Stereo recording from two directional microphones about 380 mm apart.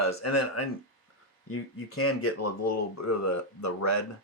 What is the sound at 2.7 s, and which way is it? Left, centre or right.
Speech, left.